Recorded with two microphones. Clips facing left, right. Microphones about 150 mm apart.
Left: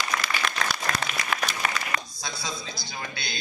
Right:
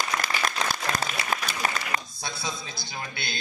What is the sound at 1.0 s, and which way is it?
Applause, 35° right (ahead or behind).